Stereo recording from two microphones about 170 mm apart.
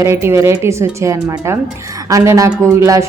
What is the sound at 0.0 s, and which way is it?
A woman's voice, 15° right (ahead or behind).